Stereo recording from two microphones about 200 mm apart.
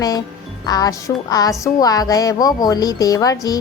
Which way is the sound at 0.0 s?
20° left (ahead or behind).